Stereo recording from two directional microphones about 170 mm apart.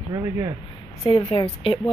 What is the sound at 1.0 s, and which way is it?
Speech, 30° left (ahead or behind).